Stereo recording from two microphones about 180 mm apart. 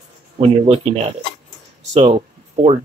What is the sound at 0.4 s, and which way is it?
Speech, 30° right (ahead or behind).